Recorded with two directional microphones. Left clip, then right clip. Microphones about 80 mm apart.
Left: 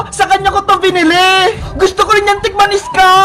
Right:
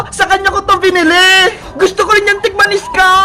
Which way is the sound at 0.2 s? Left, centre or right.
Right.